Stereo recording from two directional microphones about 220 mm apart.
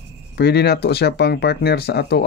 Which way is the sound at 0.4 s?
45° left (ahead or behind).